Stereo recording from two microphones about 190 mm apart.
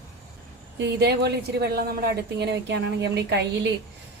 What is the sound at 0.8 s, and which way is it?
A woman's voice, 65° right (ahead or behind).